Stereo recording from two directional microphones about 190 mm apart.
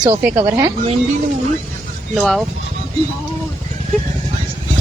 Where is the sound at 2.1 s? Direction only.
Centre (ahead or behind).